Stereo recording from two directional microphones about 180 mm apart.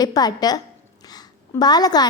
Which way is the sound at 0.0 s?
20° left (ahead or behind).